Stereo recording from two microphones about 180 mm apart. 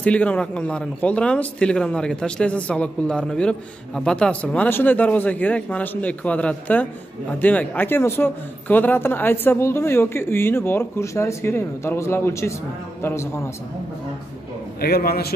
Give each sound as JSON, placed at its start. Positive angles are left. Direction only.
{"t": 0.0, "sound": "speech", "side_deg": 5}
{"t": 14.8, "sound": "a man's voice", "side_deg": 60}